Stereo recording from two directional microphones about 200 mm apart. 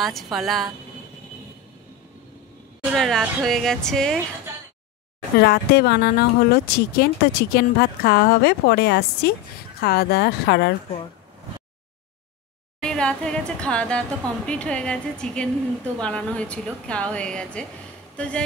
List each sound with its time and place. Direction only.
0.0 s a woman's voice: centre (ahead or behind)
2.8 s a woman's voice: centre (ahead or behind)
5.4 s speech: 55° left (ahead or behind)
12.8 s a woman's voice: 5° left (ahead or behind)